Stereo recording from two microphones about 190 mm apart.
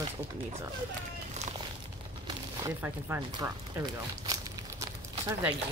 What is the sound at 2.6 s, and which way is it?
Speech, 15° right (ahead or behind).